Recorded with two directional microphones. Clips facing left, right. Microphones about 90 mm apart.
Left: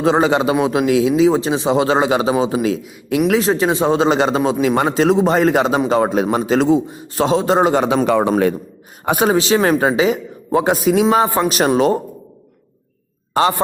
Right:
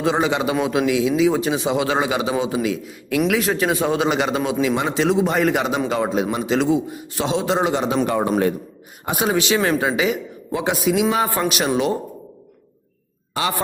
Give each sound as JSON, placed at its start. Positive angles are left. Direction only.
{"t": 0.0, "sound": "speech", "side_deg": 35}
{"t": 4.6, "sound": "speech", "side_deg": 45}
{"t": 5.9, "sound": "a man's voice", "side_deg": 45}
{"t": 8.0, "sound": "a man's voice", "side_deg": 90}
{"t": 9.0, "sound": "a man's voice", "side_deg": 50}
{"t": 9.3, "sound": "speech", "side_deg": 30}
{"t": 13.4, "sound": "a man's voice", "side_deg": 40}